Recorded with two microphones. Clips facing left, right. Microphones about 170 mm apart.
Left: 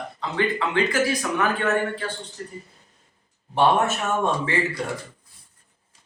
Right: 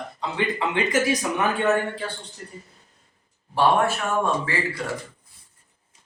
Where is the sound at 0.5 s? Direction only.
20° right (ahead or behind).